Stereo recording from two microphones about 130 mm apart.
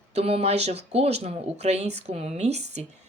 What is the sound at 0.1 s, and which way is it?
Speech, 50° right (ahead or behind).